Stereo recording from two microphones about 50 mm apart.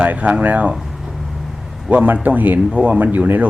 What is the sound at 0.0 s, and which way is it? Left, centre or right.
Speech, right.